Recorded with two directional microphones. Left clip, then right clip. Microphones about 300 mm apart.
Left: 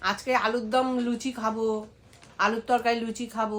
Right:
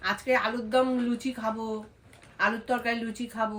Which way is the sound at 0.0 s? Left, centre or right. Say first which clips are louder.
Left 1 dB; centre.